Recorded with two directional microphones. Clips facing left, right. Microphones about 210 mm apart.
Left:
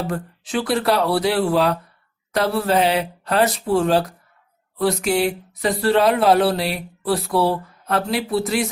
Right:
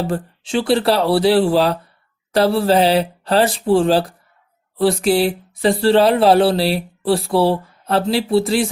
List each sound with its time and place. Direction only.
0.0 s speech: 30° right (ahead or behind)